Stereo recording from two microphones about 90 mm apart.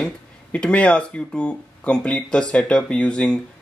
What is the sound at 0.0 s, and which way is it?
Speech, 15° left (ahead or behind).